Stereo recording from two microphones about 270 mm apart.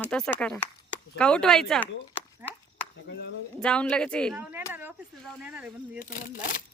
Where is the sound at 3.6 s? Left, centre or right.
Centre.